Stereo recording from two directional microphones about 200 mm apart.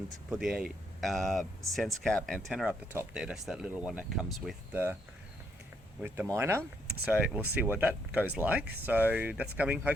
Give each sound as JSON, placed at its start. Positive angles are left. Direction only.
{"t": 0.3, "sound": "speech", "side_deg": -5}
{"t": 6.0, "sound": "speech", "side_deg": -10}